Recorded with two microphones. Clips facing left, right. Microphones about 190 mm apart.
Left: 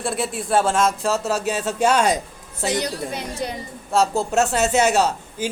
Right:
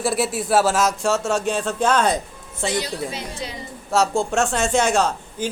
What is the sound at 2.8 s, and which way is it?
Speech, 55° left (ahead or behind).